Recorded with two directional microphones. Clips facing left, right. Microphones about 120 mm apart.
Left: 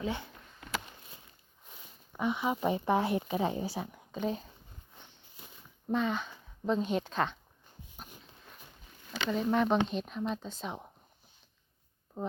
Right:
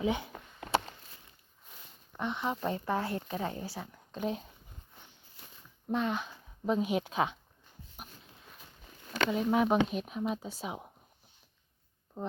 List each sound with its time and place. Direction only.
0.0 s speech: 15° right (ahead or behind)
2.1 s speech: 5° left (ahead or behind)
4.1 s speech: centre (ahead or behind)
5.9 s a woman's voice: centre (ahead or behind)
9.3 s speech: 5° right (ahead or behind)
12.1 s speech: centre (ahead or behind)